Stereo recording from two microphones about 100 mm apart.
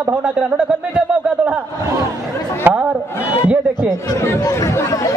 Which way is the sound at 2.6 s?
10° right (ahead or behind).